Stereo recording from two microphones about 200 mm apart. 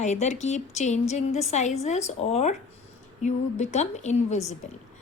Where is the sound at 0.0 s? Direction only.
35° left (ahead or behind).